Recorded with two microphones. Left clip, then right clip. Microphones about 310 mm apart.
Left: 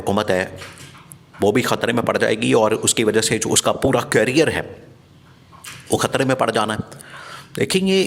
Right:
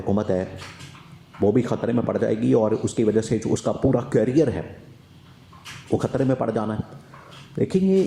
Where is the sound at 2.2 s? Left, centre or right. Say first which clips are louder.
Left 5 dB; left.